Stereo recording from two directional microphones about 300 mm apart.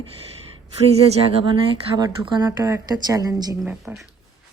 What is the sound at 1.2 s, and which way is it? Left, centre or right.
Speech, centre.